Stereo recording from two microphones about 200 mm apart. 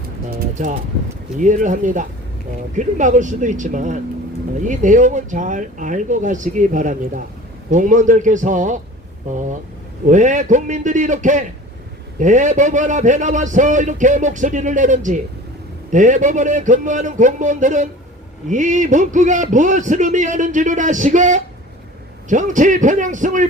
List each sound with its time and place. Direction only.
0.3 s pigeon: 45° right (ahead or behind)
1.4 s a man's voice: 40° right (ahead or behind)
10.1 s a man's voice: 40° right (ahead or behind)